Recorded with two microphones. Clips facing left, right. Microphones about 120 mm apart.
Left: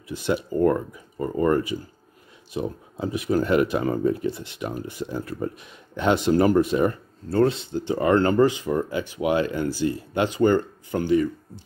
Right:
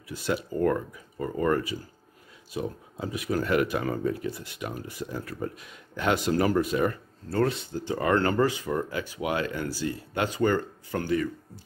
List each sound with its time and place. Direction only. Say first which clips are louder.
0.1 s speech: left 4 dB; 25° left (ahead or behind)